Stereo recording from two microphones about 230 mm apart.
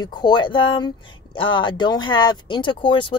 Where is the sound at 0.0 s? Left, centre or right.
Centre.